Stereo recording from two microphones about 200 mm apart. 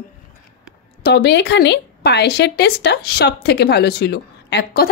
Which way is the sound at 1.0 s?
55° left (ahead or behind).